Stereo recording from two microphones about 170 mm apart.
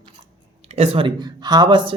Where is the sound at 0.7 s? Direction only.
35° right (ahead or behind).